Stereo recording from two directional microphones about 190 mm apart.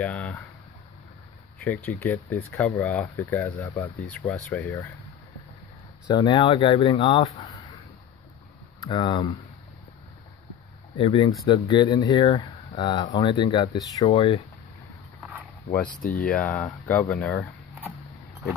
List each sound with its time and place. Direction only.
0.0 s speech: 5° left (ahead or behind)
1.6 s speech: 10° left (ahead or behind)
6.0 s speech: 25° left (ahead or behind)
8.8 s speech: 25° left (ahead or behind)
11.0 s speech: 30° left (ahead or behind)
16.0 s speech: 40° left (ahead or behind)
16.3 s speech: 5° left (ahead or behind)